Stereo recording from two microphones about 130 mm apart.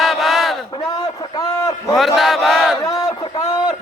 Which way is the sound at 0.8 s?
30° left (ahead or behind).